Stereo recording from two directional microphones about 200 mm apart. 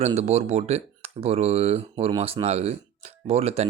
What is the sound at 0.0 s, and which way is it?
Speech, 30° right (ahead or behind).